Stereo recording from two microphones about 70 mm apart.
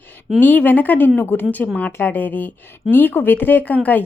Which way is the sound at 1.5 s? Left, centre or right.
Left.